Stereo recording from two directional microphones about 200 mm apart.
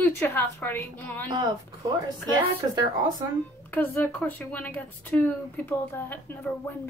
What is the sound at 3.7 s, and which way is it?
A woman's voice, 10° left (ahead or behind).